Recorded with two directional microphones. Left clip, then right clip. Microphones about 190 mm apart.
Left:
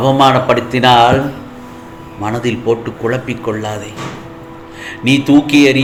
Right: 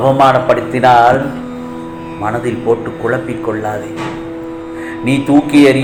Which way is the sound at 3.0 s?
55° left (ahead or behind).